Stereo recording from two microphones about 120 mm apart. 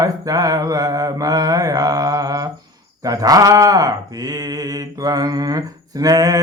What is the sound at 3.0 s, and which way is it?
Speech, 30° right (ahead or behind).